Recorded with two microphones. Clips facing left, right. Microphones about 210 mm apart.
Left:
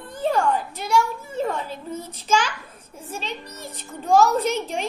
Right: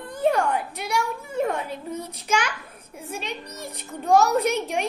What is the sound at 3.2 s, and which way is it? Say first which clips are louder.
Speech: even; 15° right (ahead or behind).